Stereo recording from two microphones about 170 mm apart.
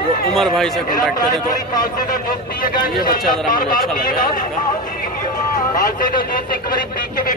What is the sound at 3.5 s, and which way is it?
Speech, 55° left (ahead or behind).